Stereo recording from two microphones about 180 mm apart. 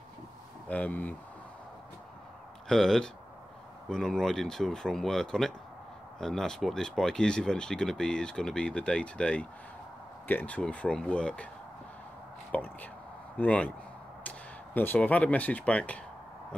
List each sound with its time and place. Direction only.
0.7 s speech: 10° left (ahead or behind)
2.7 s speech: 5° left (ahead or behind)
12.4 s a sound: 10° left (ahead or behind)
13.4 s speech: 10° left (ahead or behind)